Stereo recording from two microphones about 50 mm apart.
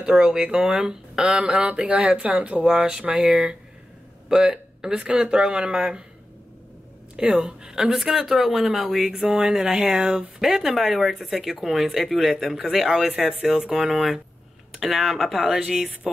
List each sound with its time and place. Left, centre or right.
0.0 s a woman's voice: centre
2.6 s a woman's voice: centre
7.2 s a woman's voice: centre
9.6 s a woman's voice: centre